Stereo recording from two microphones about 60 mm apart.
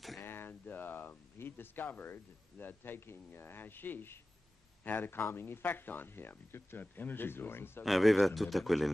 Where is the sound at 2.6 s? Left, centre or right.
Left.